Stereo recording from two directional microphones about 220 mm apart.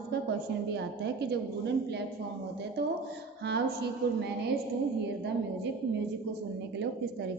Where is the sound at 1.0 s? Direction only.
50° right (ahead or behind).